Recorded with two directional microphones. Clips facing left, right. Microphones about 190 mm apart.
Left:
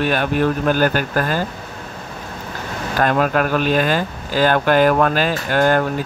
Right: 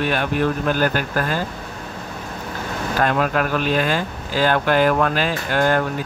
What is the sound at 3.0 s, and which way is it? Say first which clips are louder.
Speech: left 3 dB; 50° left (ahead or behind).